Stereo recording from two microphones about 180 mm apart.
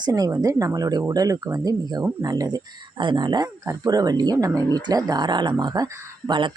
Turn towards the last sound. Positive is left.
turn(degrees=-25)  # may be behind; listen again after turning